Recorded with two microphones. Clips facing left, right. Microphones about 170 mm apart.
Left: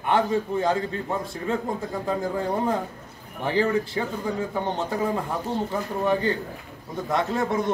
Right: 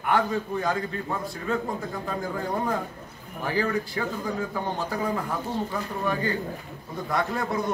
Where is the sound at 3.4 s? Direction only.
25° left (ahead or behind).